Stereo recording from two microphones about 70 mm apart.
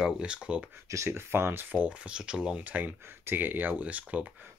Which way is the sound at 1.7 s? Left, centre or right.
Centre.